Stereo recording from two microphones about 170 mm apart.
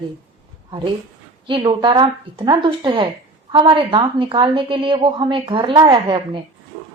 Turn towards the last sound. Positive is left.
turn(degrees=-30)  # may be behind; listen again after turning